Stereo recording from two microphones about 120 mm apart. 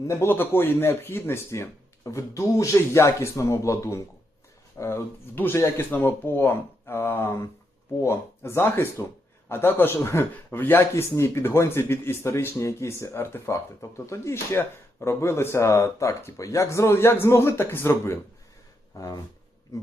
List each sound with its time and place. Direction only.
0.1 s speech: 20° left (ahead or behind)